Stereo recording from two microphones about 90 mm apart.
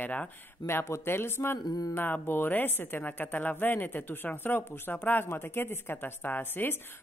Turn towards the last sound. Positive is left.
turn(degrees=20)  # may be behind; listen again after turning